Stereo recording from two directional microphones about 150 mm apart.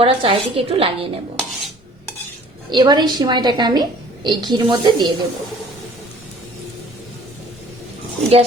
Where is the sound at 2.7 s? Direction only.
30° right (ahead or behind).